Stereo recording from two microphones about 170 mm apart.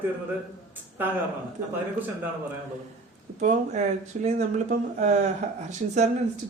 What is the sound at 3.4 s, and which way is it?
Speech, 45° right (ahead or behind).